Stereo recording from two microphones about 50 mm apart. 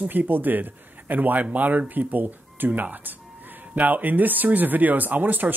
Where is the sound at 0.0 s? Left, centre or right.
Right.